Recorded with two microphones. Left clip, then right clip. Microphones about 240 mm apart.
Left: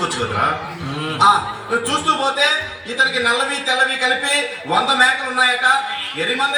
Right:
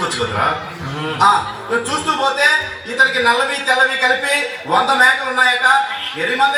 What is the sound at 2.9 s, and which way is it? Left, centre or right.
Speech, left.